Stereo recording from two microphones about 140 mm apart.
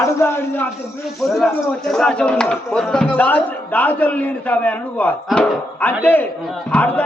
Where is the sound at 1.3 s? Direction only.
Centre (ahead or behind).